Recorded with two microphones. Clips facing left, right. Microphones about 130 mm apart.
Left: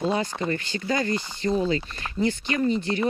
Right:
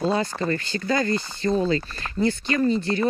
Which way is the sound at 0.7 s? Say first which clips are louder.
Right 3 dB; 40° right (ahead or behind).